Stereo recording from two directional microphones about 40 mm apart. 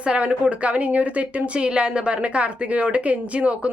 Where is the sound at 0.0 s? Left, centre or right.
Right.